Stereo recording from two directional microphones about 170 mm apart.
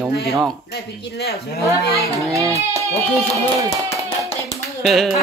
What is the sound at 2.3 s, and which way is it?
Speech, 20° right (ahead or behind).